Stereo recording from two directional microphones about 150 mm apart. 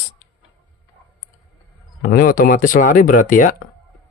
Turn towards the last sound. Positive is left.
turn(degrees=65)  # may be behind; listen again after turning